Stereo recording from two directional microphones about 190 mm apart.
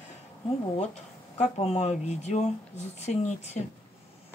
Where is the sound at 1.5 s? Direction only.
35° left (ahead or behind).